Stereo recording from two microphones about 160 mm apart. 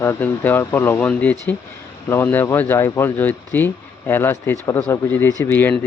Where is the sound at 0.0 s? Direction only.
15° left (ahead or behind).